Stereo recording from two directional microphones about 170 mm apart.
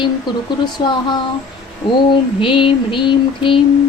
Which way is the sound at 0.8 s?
25° left (ahead or behind).